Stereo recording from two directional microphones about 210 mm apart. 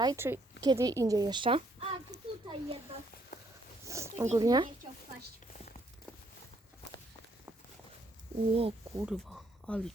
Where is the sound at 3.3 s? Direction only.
45° left (ahead or behind).